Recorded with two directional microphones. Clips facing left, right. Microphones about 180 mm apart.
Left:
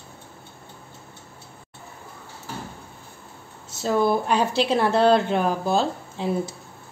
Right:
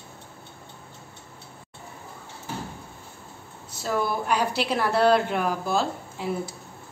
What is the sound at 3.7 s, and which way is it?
A woman's voice, 25° left (ahead or behind).